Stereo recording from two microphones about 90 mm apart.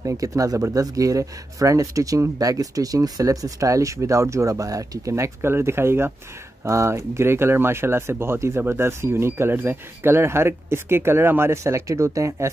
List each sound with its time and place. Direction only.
0.0 s speech: 40° right (ahead or behind)